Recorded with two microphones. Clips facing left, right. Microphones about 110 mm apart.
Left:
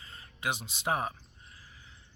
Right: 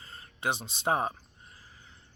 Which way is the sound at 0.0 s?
35° right (ahead or behind).